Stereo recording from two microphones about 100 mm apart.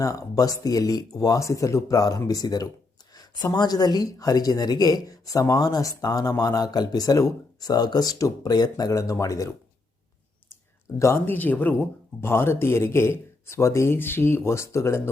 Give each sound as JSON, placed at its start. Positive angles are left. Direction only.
{"t": 0.0, "sound": "speech", "side_deg": 35}
{"t": 8.8, "sound": "speech", "side_deg": 35}
{"t": 11.0, "sound": "speech", "side_deg": 25}